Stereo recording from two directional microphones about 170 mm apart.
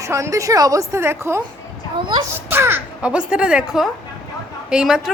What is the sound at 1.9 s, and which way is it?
Speech, 30° right (ahead or behind).